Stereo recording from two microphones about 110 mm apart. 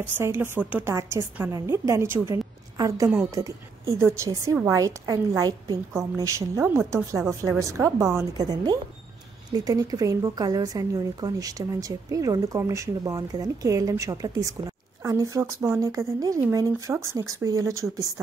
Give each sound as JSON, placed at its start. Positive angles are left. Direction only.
{"t": 0.0, "sound": "speech", "side_deg": -20}
{"t": 0.9, "sound": "a woman's voice", "side_deg": -25}
{"t": 2.3, "sound": "a sound", "side_deg": -35}
{"t": 3.3, "sound": "a woman's voice", "side_deg": -30}
{"t": 9.5, "sound": "a woman's voice", "side_deg": -35}